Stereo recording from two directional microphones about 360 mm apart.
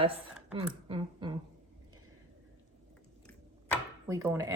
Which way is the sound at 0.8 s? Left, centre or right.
Centre.